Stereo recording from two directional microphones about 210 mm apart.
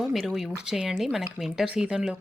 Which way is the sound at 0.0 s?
Centre (ahead or behind).